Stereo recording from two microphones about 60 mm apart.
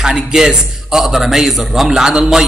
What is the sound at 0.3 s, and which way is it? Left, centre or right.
A man's voice, centre.